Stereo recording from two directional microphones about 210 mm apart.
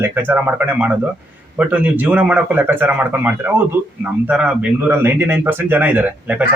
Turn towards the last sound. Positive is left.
turn(degrees=-10)  # may be behind; listen again after turning